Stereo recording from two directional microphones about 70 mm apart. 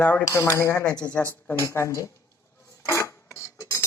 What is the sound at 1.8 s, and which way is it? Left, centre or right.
Speech, left.